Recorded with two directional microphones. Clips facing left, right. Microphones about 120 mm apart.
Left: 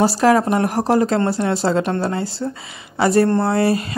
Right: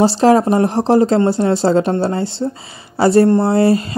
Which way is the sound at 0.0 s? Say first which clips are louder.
Right 3 dB; 25° right (ahead or behind).